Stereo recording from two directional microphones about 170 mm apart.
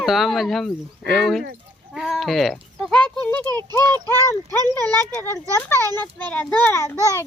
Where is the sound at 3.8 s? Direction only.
25° right (ahead or behind).